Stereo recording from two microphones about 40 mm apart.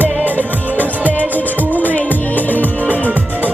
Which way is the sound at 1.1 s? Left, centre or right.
Left.